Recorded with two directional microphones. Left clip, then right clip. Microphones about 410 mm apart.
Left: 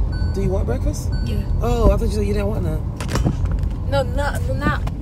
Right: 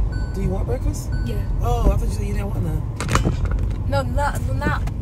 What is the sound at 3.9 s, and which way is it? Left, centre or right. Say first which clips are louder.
Speech: left 1 dB; centre.